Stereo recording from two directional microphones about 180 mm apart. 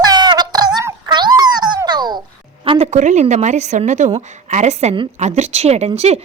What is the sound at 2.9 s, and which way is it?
A woman's voice, 40° right (ahead or behind).